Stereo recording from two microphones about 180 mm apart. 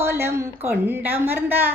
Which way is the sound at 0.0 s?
15° right (ahead or behind).